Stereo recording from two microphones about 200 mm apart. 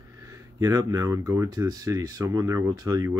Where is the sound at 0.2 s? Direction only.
15° right (ahead or behind).